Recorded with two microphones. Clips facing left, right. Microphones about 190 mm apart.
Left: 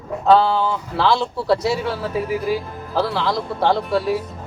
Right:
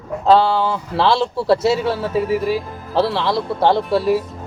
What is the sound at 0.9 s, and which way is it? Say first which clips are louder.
Speech: right 3 dB; 25° right (ahead or behind).